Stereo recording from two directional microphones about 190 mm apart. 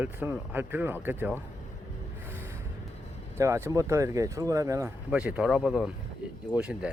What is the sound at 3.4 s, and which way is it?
Speech, 15° right (ahead or behind).